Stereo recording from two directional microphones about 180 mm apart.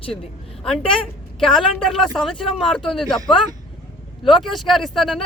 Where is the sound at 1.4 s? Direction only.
Centre (ahead or behind).